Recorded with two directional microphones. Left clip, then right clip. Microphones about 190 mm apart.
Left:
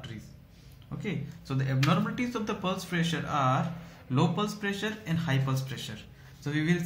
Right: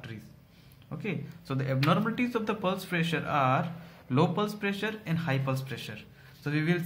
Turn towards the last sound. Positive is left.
turn(degrees=-45)  # may be behind; listen again after turning